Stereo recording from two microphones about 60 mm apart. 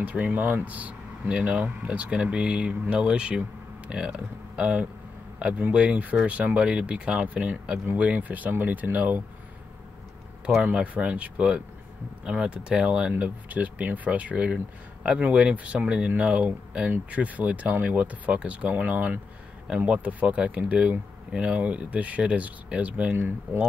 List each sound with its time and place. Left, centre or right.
0.0 s speech: right
10.6 s speech: right
13.1 s speech: right
23.1 s speech: right